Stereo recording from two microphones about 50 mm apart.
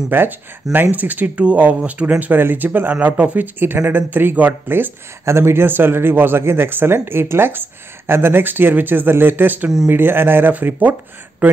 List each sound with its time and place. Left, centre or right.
0.1 s speech: right
0.9 s speech: right
5.2 s speech: right
10.5 s speech: right